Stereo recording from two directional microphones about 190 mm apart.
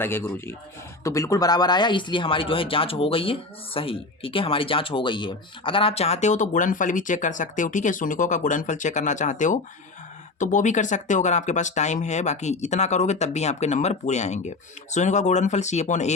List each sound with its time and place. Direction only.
0.0 s a man's voice: 10° left (ahead or behind); by 16.1 s 35° left (ahead or behind)